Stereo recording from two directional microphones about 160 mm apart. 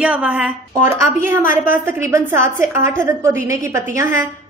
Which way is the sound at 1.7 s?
15° right (ahead or behind).